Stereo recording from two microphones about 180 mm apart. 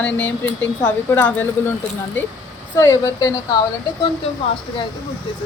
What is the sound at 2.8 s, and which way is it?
Speech, 15° left (ahead or behind).